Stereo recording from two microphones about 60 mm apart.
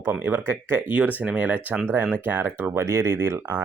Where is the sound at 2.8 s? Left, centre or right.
Right.